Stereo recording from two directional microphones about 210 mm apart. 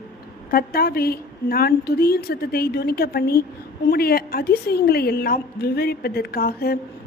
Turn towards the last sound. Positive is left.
turn(degrees=45)  # may be behind; listen again after turning